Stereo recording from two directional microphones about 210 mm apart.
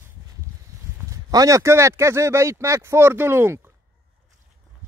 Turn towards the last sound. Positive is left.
turn(degrees=-10)  # may be behind; listen again after turning